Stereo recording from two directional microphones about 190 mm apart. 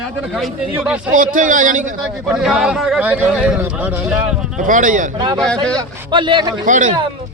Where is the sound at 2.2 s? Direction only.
5° right (ahead or behind).